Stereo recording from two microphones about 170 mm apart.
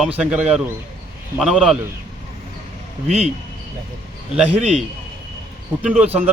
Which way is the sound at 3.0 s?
40° right (ahead or behind).